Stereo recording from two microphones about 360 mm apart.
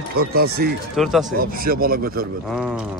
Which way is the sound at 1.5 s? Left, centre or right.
Right.